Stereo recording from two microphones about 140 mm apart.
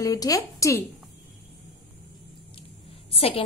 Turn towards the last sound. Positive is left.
turn(degrees=45)  # may be behind; listen again after turning